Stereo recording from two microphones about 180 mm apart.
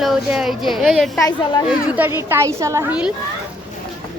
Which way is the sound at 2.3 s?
15° right (ahead or behind).